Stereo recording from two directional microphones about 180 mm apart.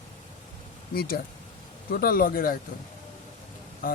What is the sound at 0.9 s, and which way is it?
Speech, 55° left (ahead or behind).